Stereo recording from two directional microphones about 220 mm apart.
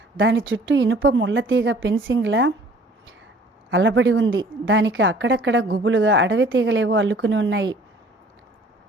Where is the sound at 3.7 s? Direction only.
55° right (ahead or behind).